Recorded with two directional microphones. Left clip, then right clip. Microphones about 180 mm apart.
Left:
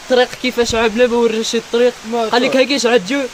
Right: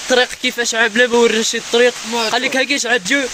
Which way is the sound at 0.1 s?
5° right (ahead or behind).